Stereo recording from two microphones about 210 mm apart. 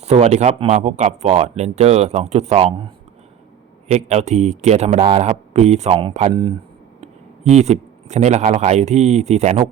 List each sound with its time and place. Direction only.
0.0 s speech: 30° right (ahead or behind)